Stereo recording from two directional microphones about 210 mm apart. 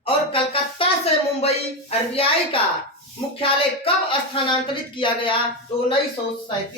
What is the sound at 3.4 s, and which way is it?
Speech, 25° left (ahead or behind).